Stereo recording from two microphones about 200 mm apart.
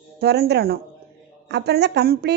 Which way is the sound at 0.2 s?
55° right (ahead or behind).